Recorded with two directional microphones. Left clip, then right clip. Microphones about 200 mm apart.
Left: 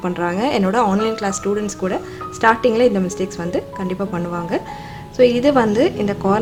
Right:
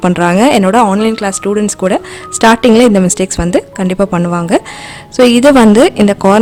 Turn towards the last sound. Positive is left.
turn(degrees=-50)  # may be behind; listen again after turning